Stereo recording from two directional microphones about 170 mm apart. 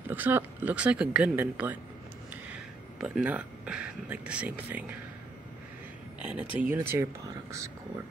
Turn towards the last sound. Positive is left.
turn(degrees=-15)  # may be behind; listen again after turning